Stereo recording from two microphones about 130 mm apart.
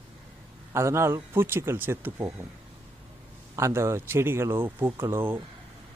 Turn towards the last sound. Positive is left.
turn(degrees=-15)  # may be behind; listen again after turning